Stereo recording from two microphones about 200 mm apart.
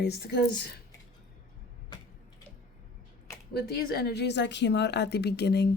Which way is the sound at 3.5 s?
55° left (ahead or behind).